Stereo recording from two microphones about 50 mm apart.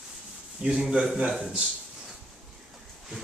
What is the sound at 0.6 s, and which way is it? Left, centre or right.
Speech, right.